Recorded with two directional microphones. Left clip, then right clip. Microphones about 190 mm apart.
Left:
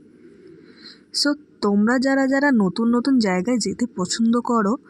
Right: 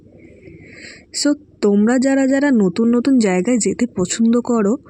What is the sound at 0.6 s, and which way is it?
Speech, 20° right (ahead or behind).